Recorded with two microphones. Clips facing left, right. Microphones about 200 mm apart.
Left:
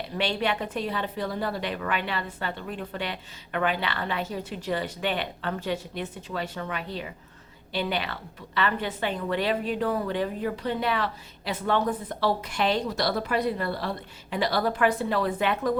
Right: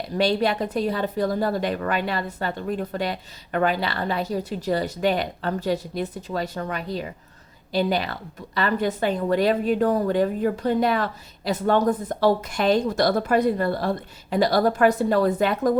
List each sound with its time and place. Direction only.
0.2 s a woman's voice: 40° right (ahead or behind)